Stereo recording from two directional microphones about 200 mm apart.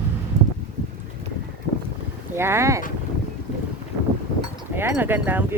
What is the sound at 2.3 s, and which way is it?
Speech, 10° right (ahead or behind).